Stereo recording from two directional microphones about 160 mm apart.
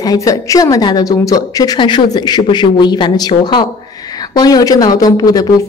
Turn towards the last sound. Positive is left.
turn(degrees=25)  # may be behind; listen again after turning